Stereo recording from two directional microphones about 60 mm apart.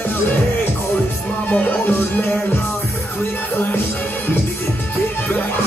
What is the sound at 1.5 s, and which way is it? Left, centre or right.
Music, left.